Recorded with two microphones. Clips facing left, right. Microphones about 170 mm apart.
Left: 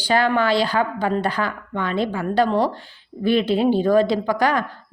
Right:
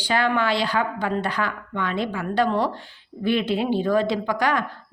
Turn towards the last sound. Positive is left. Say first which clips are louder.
# left 3 dB
turn(degrees=35)  # may be behind; listen again after turning